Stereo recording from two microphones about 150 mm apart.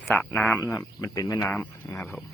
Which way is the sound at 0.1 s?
10° left (ahead or behind).